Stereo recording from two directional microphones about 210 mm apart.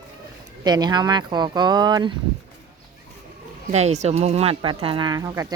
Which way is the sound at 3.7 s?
30° right (ahead or behind).